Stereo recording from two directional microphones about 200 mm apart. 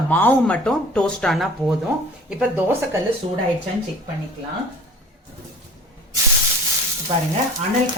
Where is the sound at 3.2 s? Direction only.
35° right (ahead or behind).